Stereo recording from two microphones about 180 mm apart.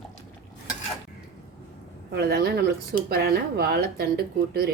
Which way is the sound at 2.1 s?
65° right (ahead or behind).